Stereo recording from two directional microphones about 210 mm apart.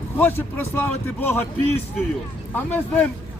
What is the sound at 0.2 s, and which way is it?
Speech, 10° left (ahead or behind).